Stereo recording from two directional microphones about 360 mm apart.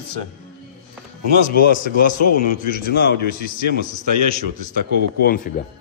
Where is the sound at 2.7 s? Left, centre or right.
Left.